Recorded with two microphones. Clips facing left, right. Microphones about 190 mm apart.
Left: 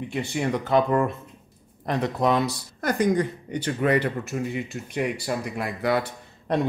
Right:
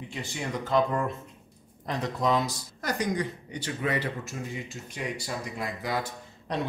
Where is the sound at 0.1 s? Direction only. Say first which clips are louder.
Left 8 dB; 60° left (ahead or behind).